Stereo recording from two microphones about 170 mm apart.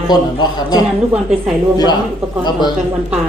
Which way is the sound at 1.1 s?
5° right (ahead or behind).